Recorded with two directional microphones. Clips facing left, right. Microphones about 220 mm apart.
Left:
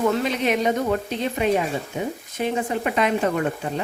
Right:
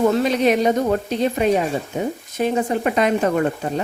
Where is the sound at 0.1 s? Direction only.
40° right (ahead or behind).